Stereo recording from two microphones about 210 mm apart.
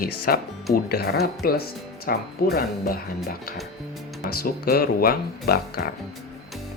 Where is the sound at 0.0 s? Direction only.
45° left (ahead or behind).